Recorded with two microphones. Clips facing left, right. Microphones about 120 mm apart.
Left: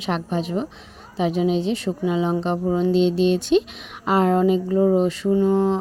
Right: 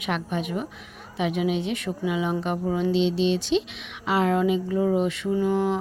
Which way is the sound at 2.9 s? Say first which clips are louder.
Left 4 dB; 45° left (ahead or behind).